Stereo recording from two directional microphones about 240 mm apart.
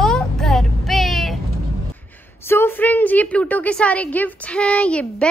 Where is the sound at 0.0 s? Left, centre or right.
Centre.